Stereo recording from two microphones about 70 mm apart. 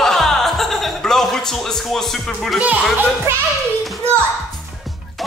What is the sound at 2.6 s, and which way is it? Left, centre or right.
Speech, right.